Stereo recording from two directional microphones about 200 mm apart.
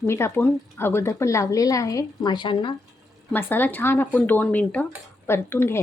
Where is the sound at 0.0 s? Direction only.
15° left (ahead or behind).